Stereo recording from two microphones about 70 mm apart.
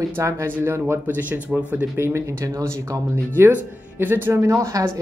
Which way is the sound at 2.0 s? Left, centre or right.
Right.